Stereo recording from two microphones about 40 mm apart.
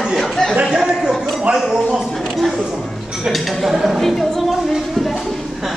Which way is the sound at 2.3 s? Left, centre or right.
Centre.